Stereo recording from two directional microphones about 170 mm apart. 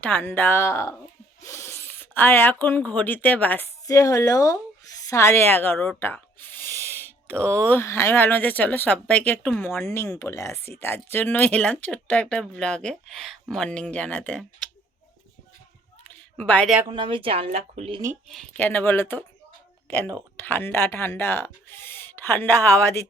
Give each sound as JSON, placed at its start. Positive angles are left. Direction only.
{"t": 0.0, "sound": "speech", "side_deg": 10}
{"t": 6.8, "sound": "a sound", "side_deg": 10}
{"t": 7.6, "sound": "speech", "side_deg": 10}
{"t": 16.0, "sound": "a sound", "side_deg": 10}
{"t": 16.9, "sound": "speech", "side_deg": -30}
{"t": 18.3, "sound": "speech", "side_deg": 5}
{"t": 20.4, "sound": "speech", "side_deg": 10}